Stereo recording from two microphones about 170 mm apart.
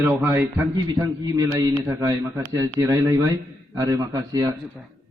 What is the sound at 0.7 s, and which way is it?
A man's voice, 25° right (ahead or behind).